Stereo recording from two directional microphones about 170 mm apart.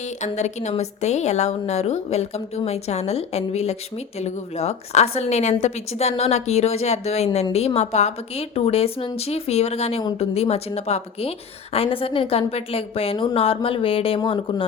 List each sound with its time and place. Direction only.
0.2 s a woman's voice: 45° left (ahead or behind)